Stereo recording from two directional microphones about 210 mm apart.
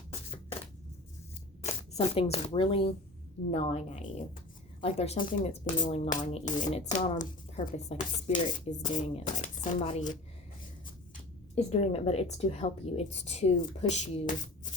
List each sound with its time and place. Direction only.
1.6 s speech: 30° left (ahead or behind)